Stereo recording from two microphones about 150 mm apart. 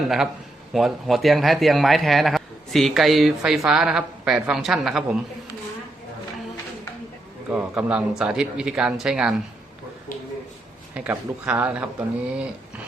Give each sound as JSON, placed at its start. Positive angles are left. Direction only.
{"t": 0.7, "sound": "a man's voice", "side_deg": 0}
{"t": 7.5, "sound": "speech", "side_deg": -10}
{"t": 10.1, "sound": "a sound", "side_deg": 70}
{"t": 10.9, "sound": "speech", "side_deg": -10}